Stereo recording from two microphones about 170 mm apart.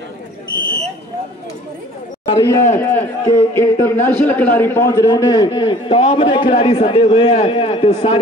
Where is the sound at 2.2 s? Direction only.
20° left (ahead or behind).